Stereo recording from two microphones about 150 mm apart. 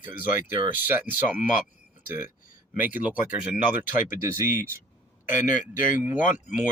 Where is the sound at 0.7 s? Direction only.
15° right (ahead or behind).